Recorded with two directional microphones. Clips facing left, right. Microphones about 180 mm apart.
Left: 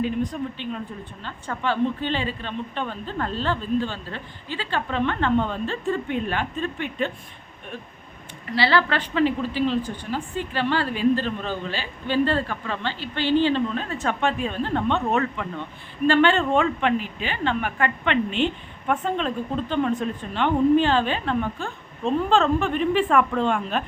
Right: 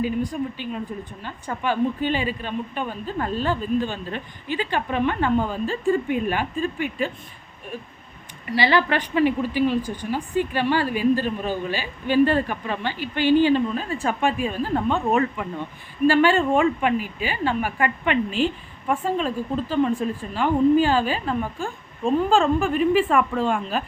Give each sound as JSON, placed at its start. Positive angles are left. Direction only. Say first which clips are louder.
{"t": 0.0, "sound": "a woman's voice", "louder": "right 1 dB", "side_deg": -10}
{"t": 8.4, "sound": "a woman's voice", "louder": "right 1 dB", "side_deg": -15}